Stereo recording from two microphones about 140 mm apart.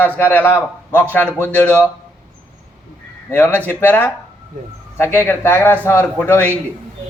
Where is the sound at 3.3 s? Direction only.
15° left (ahead or behind).